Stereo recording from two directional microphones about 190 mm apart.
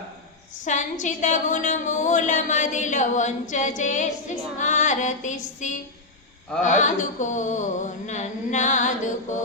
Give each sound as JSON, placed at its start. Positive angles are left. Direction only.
{"t": 0.6, "sound": "a woman's voice", "side_deg": 40}